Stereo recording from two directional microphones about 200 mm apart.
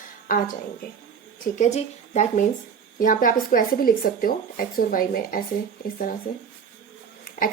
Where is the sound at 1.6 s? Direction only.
35° left (ahead or behind).